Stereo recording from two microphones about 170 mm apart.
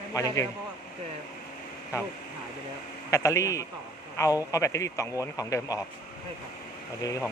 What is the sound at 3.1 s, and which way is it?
Speech, 20° left (ahead or behind).